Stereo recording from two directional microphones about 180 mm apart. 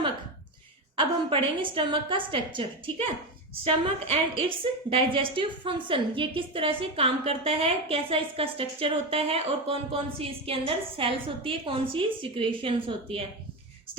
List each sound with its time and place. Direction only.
0.9 s a woman's voice: 30° right (ahead or behind)
4.1 s a woman's voice: 30° right (ahead or behind)